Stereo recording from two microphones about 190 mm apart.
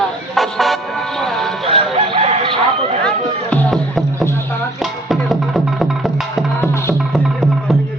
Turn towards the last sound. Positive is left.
turn(degrees=0)  # may be behind; listen again after turning